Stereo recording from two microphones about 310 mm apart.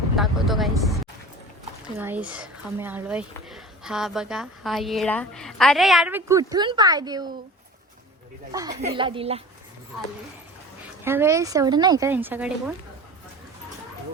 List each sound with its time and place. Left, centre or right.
0.2 s a woman's voice: centre
2.0 s speech: centre
8.5 s speech: centre
11.0 s speech: centre